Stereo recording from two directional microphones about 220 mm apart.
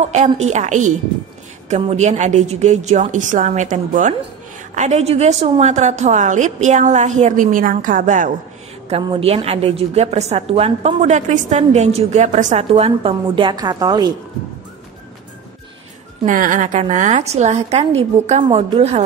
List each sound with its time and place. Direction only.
0.0 s a woman's voice: 30° right (ahead or behind)
16.3 s a woman's voice: 35° right (ahead or behind)